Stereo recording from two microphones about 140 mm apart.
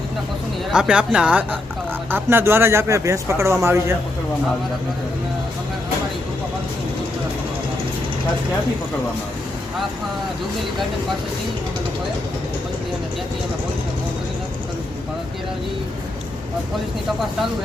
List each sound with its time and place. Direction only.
0.7 s a man's voice: 5° right (ahead or behind)